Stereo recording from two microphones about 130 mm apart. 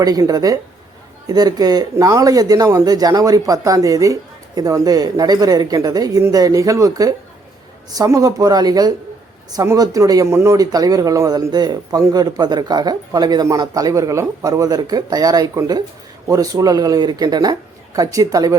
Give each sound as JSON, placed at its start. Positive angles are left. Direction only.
{"t": 0.0, "sound": "speech", "side_deg": -30}